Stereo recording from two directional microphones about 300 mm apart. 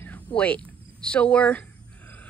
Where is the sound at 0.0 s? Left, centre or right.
Centre.